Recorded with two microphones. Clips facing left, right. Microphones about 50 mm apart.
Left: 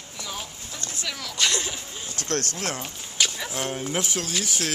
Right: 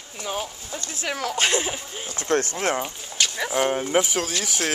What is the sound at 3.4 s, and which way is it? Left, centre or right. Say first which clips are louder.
Speech: right 7 dB; right.